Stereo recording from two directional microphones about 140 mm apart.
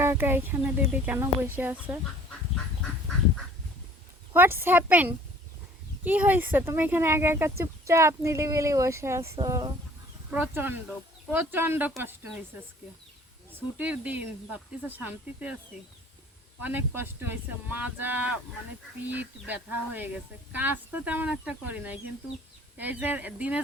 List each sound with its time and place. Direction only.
0.0 s speech: 15° right (ahead or behind)
4.4 s speech: 15° right (ahead or behind)
6.1 s speech: 15° right (ahead or behind)
10.3 s speech: 15° right (ahead or behind)
13.7 s speech: 10° right (ahead or behind)
16.6 s speech: 15° right (ahead or behind)